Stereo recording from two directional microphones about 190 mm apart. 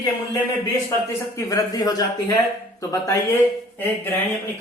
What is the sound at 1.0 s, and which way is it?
Speech, 15° left (ahead or behind).